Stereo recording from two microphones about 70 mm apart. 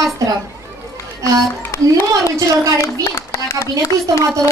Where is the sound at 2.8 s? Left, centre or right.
Left.